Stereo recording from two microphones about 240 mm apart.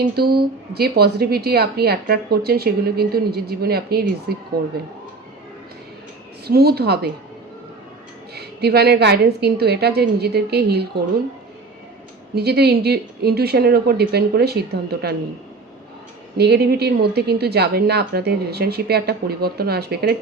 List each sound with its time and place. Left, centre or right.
0.2 s a woman's voice: right
6.5 s a woman's voice: right
8.4 s a woman's voice: right
12.3 s a woman's voice: right
16.4 s a woman's voice: right